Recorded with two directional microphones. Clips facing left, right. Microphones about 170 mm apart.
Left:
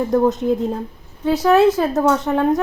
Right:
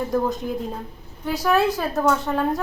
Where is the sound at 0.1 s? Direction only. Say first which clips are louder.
Left 7 dB; 20° left (ahead or behind).